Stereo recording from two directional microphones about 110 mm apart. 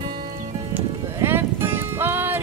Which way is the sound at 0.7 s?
20° right (ahead or behind).